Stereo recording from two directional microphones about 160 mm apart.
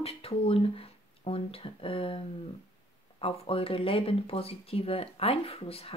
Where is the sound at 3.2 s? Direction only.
35° left (ahead or behind).